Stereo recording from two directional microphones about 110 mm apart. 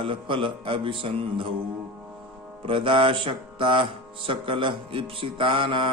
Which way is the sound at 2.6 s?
50° right (ahead or behind).